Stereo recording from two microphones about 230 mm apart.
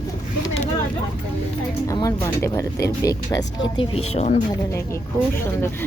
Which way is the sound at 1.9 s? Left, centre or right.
Centre.